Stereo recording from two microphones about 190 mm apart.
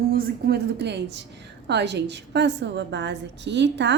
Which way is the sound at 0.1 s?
55° right (ahead or behind).